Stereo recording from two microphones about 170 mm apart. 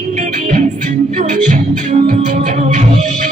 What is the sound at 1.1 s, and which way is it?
Music, 45° right (ahead or behind).